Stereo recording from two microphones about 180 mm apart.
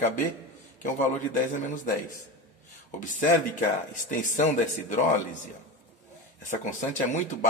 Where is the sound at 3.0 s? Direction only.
45° left (ahead or behind).